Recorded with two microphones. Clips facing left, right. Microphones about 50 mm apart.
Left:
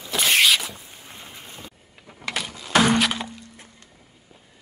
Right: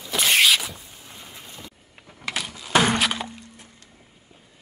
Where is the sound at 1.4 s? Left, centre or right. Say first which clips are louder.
Left 1 dB; left.